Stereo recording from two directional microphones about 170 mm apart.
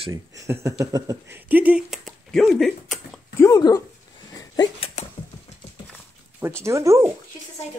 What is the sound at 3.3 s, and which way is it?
Speech, 20° left (ahead or behind).